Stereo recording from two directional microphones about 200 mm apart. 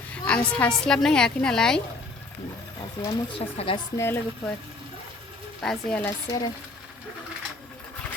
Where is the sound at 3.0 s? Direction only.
25° left (ahead or behind).